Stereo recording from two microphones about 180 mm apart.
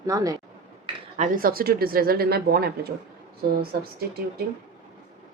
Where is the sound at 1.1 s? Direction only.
45° right (ahead or behind).